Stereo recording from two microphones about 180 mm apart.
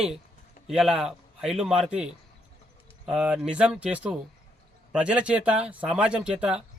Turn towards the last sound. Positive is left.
turn(degrees=-5)  # may be behind; listen again after turning